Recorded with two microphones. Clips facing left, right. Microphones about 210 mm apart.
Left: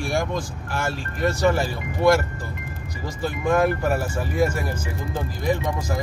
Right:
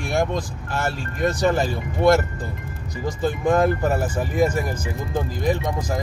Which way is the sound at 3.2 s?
20° right (ahead or behind).